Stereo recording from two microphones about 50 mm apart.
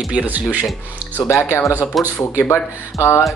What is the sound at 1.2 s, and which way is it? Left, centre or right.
Speech, left.